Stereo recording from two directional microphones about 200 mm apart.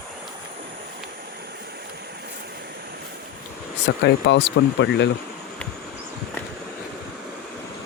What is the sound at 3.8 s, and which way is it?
Speech, 60° left (ahead or behind).